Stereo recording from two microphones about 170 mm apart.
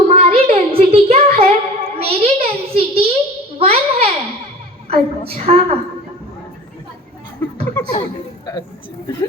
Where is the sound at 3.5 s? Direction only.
35° right (ahead or behind).